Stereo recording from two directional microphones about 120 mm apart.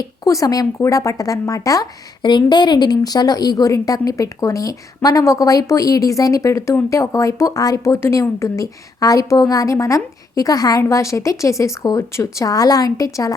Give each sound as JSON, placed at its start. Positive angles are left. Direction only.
{"t": 0.3, "sound": "speech", "side_deg": 30}